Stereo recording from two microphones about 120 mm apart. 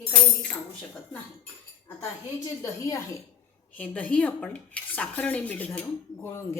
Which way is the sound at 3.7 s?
10° left (ahead or behind).